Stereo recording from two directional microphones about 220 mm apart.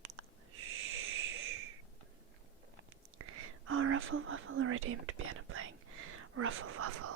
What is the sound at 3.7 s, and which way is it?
Whispering, 65° right (ahead or behind).